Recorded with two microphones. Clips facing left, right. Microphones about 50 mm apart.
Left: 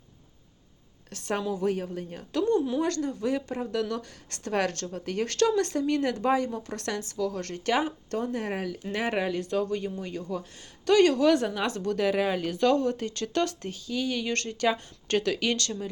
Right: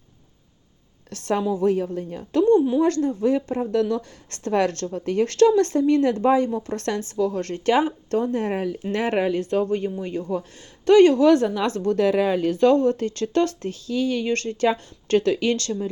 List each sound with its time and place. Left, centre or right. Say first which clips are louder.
1.1 s a woman's voice: right 6 dB; right
1.4 s speech: right 7 dB; right
1.6 s speech: right 7 dB; right
2.6 s speech: right 7 dB; centre
2.8 s speech: right 8 dB; right